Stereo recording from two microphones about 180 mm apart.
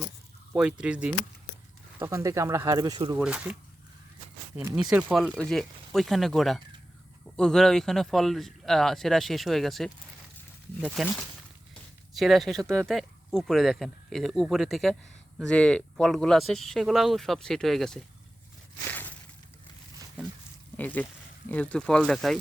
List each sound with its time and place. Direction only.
0.5 s speech: 5° right (ahead or behind)
2.0 s speech: 15° right (ahead or behind)
3.2 s speech: 5° right (ahead or behind)
4.9 s speech: 5° right (ahead or behind)
18.9 s a sound: 10° left (ahead or behind)
20.7 s speech: 10° left (ahead or behind)